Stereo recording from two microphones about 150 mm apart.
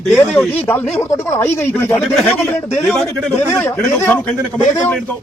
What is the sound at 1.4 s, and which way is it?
Speech, 15° left (ahead or behind).